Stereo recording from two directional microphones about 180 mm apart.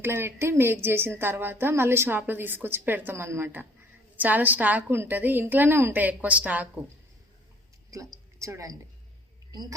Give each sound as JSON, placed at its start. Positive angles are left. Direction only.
{"t": 0.0, "sound": "a woman's voice", "side_deg": -15}
{"t": 7.9, "sound": "a woman's voice", "side_deg": -15}